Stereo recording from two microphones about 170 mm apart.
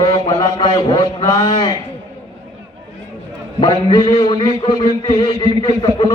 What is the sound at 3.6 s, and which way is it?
A man's voice, 25° left (ahead or behind).